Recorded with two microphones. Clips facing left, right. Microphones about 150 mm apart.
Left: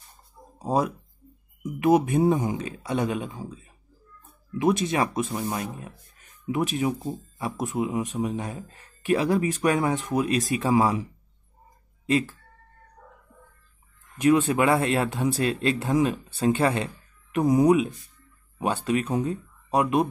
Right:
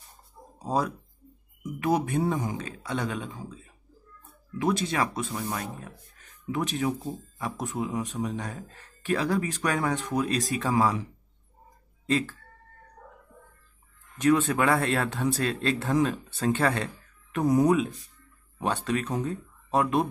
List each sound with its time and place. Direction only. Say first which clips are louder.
0.7 s speech: left 3 dB; 15° left (ahead or behind)
5.0 s speech: left 3 dB; 10° left (ahead or behind)
12.1 s speech: left 3 dB; 10° left (ahead or behind)
14.2 s speech: left 3 dB; 15° left (ahead or behind)